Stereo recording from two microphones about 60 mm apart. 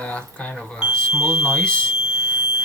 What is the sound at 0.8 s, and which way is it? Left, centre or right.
Speech, centre.